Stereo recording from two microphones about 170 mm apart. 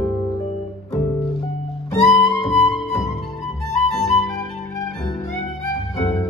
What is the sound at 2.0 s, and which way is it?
Music, centre (ahead or behind).